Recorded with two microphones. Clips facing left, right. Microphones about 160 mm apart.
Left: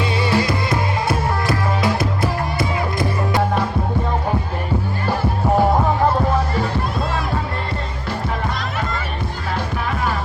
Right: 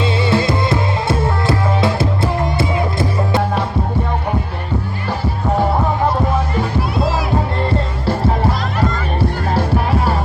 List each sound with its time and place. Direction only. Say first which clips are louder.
0.0 s music: right 3 dB; 25° right (ahead or behind)